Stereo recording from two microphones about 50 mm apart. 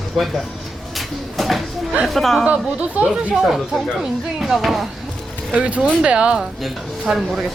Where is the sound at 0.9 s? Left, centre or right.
Centre.